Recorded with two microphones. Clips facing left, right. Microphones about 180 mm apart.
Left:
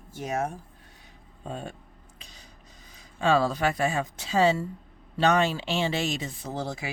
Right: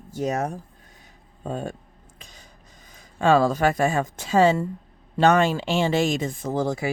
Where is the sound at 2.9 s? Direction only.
50° right (ahead or behind).